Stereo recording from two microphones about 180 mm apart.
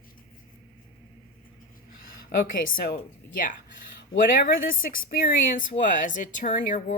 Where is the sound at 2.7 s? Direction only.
55° left (ahead or behind).